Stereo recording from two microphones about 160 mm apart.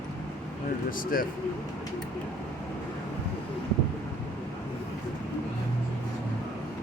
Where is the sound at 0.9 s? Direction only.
60° left (ahead or behind).